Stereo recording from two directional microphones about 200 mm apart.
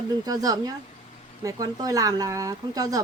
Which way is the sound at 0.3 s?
20° right (ahead or behind).